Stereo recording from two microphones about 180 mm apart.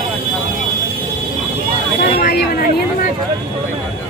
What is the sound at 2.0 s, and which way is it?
Vehicle, 60° left (ahead or behind).